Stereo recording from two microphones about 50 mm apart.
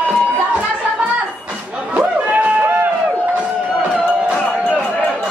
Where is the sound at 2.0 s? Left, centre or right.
Right.